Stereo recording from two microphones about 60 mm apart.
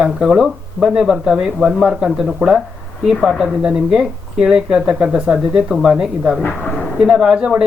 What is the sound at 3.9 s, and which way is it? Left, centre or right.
Speech, centre.